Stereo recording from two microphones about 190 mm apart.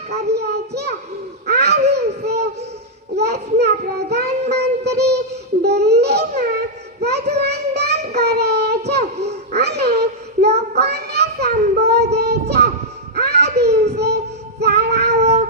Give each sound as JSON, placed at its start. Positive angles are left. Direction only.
{"t": 0.3, "sound": "a sound", "side_deg": -60}
{"t": 1.5, "sound": "babbling", "side_deg": -60}
{"t": 1.9, "sound": "child singing", "side_deg": -60}